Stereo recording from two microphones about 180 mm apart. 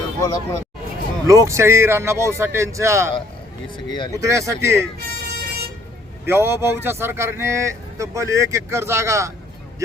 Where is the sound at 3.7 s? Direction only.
25° left (ahead or behind).